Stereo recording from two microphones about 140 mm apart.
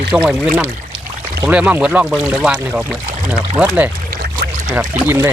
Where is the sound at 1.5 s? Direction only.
10° right (ahead or behind).